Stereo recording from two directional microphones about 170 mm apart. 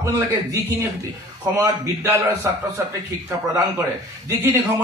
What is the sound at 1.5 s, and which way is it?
A man's voice, 15° right (ahead or behind).